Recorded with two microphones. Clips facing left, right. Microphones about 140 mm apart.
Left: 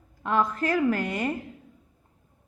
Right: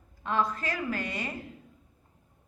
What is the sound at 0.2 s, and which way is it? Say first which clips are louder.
A woman's voice: left 4 dB; 50° left (ahead or behind).